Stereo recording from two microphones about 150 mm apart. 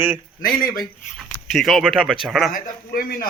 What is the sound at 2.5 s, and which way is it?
Speech, 70° left (ahead or behind).